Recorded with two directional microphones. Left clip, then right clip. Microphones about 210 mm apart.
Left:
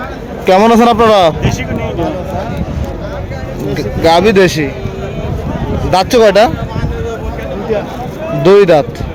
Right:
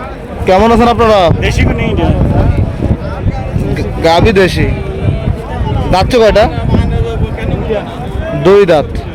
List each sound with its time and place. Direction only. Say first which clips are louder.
0.4 s speech: even; 10° left (ahead or behind)
1.4 s speech: right 4 dB; 40° right (ahead or behind)
3.8 s a man's voice: even; 5° left (ahead or behind)
5.9 s a man's voice: even; 5° left (ahead or behind)
8.4 s a man's voice: even; centre (ahead or behind)